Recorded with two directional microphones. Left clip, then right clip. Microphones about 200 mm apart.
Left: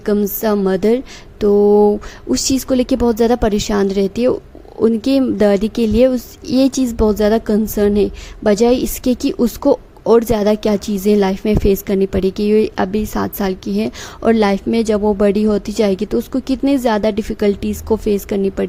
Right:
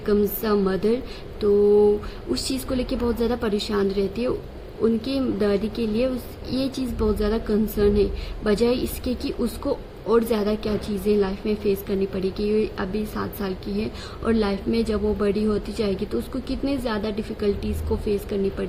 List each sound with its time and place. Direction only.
0.0 s a woman's voice: 50° left (ahead or behind)